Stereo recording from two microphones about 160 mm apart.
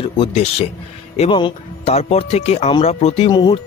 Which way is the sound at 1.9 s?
45° left (ahead or behind).